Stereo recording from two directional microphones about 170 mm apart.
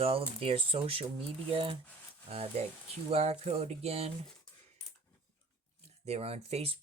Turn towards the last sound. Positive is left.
turn(degrees=-40)  # may be behind; listen again after turning